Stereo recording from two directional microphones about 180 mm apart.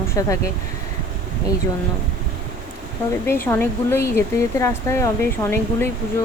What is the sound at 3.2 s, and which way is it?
Speech, 15° left (ahead or behind).